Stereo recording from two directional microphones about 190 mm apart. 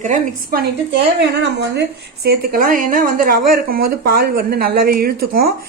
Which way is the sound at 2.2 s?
55° right (ahead or behind).